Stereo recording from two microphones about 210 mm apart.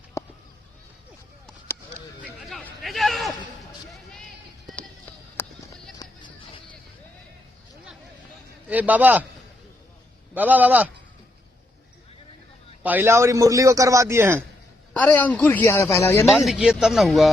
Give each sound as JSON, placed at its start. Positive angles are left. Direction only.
{"t": 0.2, "sound": "a sound", "side_deg": 15}
{"t": 2.2, "sound": "a sound", "side_deg": 0}
{"t": 5.4, "sound": "run", "side_deg": 10}
{"t": 6.0, "sound": "a sound", "side_deg": 20}
{"t": 8.6, "sound": "a man's voice", "side_deg": -5}
{"t": 10.3, "sound": "a man's voice", "side_deg": -10}
{"t": 12.8, "sound": "a man's voice", "side_deg": -10}
{"t": 14.9, "sound": "speech", "side_deg": 5}
{"t": 16.3, "sound": "speech", "side_deg": 0}